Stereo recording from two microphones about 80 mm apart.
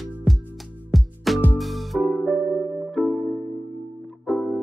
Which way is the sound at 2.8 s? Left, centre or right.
Centre.